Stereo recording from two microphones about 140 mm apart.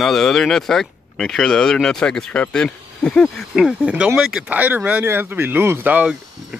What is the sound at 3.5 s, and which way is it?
Speech, 5° right (ahead or behind).